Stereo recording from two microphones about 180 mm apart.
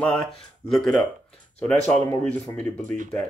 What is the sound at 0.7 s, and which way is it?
Speech, centre (ahead or behind).